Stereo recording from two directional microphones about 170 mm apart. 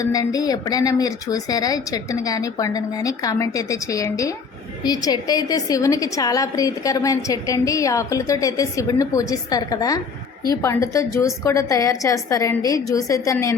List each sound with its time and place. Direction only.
0.0 s a woman's voice: 20° left (ahead or behind)